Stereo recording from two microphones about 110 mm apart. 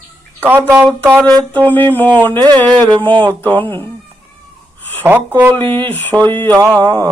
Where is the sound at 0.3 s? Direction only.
20° right (ahead or behind).